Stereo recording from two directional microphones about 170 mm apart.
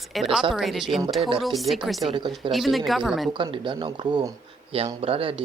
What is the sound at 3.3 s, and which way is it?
Speech, 30° right (ahead or behind).